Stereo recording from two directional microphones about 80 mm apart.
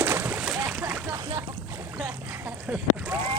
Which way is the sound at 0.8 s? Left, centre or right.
Right.